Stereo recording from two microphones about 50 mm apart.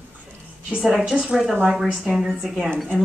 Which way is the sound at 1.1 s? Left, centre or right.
Centre.